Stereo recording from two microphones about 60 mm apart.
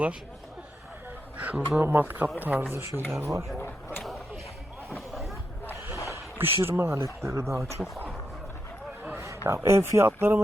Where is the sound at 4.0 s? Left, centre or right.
Centre.